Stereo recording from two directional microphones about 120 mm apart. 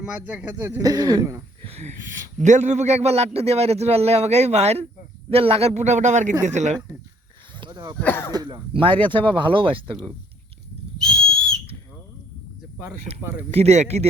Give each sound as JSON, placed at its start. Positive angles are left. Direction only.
{"t": 0.2, "sound": "speech", "side_deg": -10}
{"t": 0.8, "sound": "speech", "side_deg": -30}
{"t": 1.6, "sound": "speech", "side_deg": -65}
{"t": 2.4, "sound": "a man's voice", "side_deg": -80}
{"t": 6.4, "sound": "a man's voice", "side_deg": -75}
{"t": 7.6, "sound": "a sound", "side_deg": -35}
{"t": 8.0, "sound": "speech", "side_deg": 20}
{"t": 8.3, "sound": "speech", "side_deg": -35}
{"t": 11.0, "sound": "whistle", "side_deg": 5}
{"t": 13.5, "sound": "a man's voice", "side_deg": -65}